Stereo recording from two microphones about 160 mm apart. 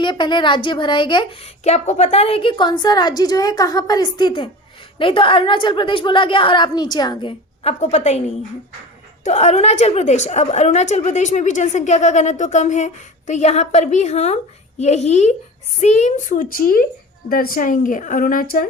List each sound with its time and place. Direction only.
0.0 s a woman's voice: 30° left (ahead or behind)
1.6 s a woman's voice: 45° left (ahead or behind)
9.2 s a woman's voice: 45° left (ahead or behind); by 18.6 s 60° left (ahead or behind)